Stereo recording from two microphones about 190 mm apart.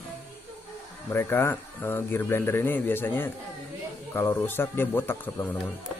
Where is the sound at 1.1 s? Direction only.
10° left (ahead or behind).